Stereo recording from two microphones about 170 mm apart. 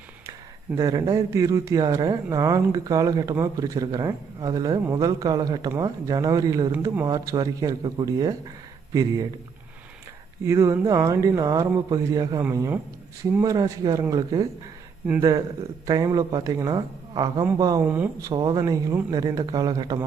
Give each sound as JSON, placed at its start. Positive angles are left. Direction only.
{"t": 0.8, "sound": "speech", "side_deg": -20}
{"t": 10.4, "sound": "speech", "side_deg": -15}
{"t": 15.9, "sound": "speech", "side_deg": -20}
{"t": 18.3, "sound": "speech", "side_deg": -25}